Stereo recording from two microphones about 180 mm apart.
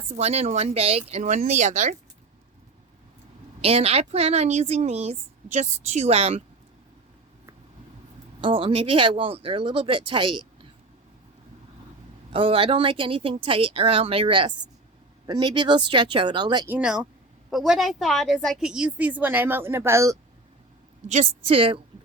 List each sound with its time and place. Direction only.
0.2 s speech: 35° right (ahead or behind)
3.6 s speech: 35° right (ahead or behind)
8.4 s speech: 30° right (ahead or behind)
12.3 s speech: 30° right (ahead or behind)
16.6 s a woman's voice: 5° right (ahead or behind)
21.1 s speech: 35° right (ahead or behind)